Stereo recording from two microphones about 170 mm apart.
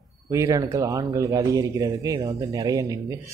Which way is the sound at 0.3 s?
20° right (ahead or behind).